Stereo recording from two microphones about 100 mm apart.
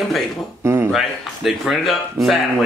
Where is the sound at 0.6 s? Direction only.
30° right (ahead or behind).